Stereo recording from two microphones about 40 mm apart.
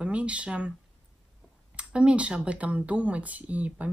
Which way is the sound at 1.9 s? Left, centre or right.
Right.